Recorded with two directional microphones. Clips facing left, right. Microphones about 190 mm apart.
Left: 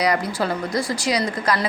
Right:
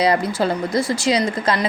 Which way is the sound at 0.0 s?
25° right (ahead or behind).